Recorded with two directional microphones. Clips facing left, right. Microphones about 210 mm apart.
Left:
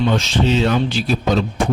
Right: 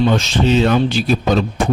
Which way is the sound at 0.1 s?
45° right (ahead or behind).